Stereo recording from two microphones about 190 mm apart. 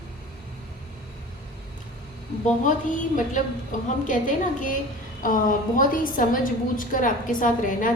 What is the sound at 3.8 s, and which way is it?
Speech, 40° left (ahead or behind).